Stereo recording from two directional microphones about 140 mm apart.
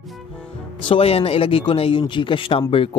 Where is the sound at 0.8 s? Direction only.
40° left (ahead or behind).